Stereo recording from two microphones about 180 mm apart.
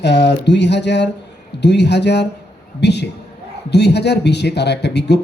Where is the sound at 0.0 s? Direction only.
65° left (ahead or behind).